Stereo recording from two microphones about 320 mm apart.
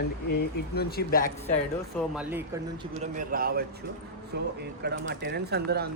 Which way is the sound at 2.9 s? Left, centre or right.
Right.